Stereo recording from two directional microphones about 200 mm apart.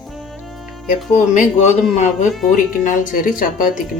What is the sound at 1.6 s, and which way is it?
Speech, 35° left (ahead or behind).